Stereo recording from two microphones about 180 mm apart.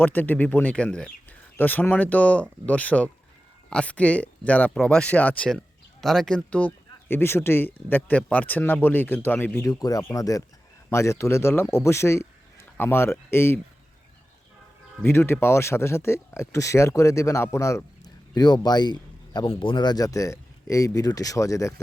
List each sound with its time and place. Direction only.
0.0 s speech: 10° left (ahead or behind)
15.0 s speech: 15° left (ahead or behind)